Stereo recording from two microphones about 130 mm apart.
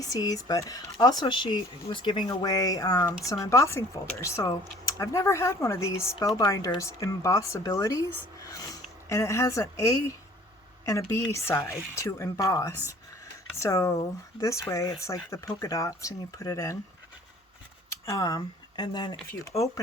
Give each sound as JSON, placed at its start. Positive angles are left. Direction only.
{"t": 0.0, "sound": "speech", "side_deg": 30}
{"t": 17.8, "sound": "speech", "side_deg": 25}